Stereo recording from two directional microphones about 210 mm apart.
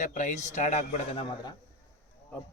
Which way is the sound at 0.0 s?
35° left (ahead or behind).